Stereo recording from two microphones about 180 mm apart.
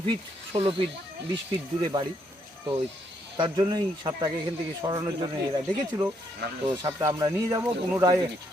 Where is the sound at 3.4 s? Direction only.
20° right (ahead or behind).